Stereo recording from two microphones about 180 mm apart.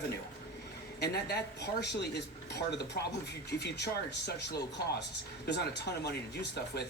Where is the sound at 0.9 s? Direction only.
65° left (ahead or behind).